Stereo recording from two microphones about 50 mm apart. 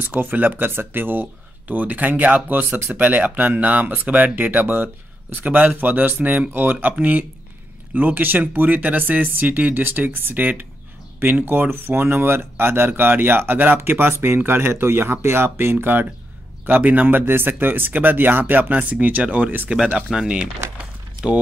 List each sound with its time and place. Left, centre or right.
0.0 s speech: right
20.2 s speech: right